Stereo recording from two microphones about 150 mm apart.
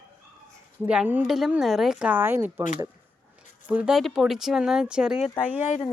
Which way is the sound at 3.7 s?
5° right (ahead or behind).